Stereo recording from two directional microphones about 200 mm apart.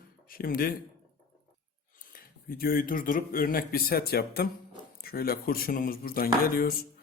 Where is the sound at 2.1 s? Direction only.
45° left (ahead or behind).